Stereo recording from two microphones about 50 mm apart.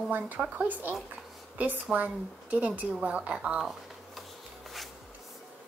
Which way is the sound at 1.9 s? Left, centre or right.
Right.